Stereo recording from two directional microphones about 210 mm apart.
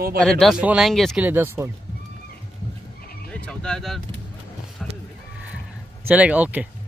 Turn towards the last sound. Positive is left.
turn(degrees=-5)  # may be behind; listen again after turning